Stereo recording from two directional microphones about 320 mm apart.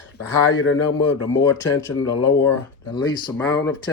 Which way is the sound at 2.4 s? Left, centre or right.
Centre.